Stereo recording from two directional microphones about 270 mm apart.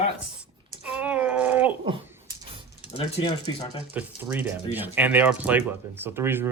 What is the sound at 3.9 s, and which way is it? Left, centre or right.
Speech, centre.